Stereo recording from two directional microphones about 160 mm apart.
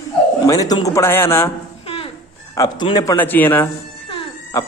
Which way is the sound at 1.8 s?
35° left (ahead or behind).